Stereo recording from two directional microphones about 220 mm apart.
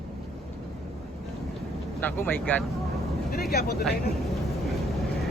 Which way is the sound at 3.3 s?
45° left (ahead or behind).